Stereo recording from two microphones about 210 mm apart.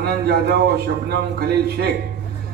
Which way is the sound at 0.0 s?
50° right (ahead or behind).